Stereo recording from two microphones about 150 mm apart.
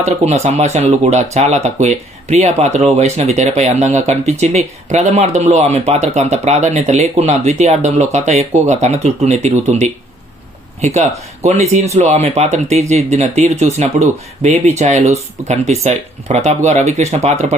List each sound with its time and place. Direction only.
0.0 s speech: 45° right (ahead or behind)